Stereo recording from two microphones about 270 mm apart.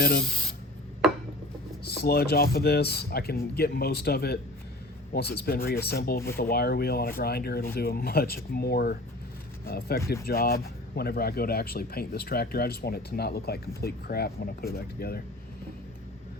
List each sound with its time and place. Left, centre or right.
0.0 s speech: left
1.8 s speech: left